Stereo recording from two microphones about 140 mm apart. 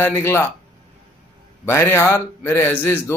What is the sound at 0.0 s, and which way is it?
Speech, 15° left (ahead or behind).